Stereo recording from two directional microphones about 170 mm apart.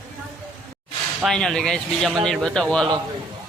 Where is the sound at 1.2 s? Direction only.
Centre (ahead or behind).